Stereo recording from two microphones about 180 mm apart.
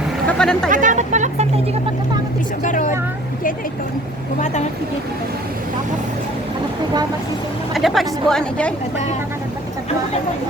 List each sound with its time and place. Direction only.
0.3 s speech: 5° left (ahead or behind)
0.7 s speech: 45° right (ahead or behind)
2.6 s a woman's voice: 45° left (ahead or behind)
4.4 s a woman's voice: 40° left (ahead or behind)
7.7 s speech: centre (ahead or behind)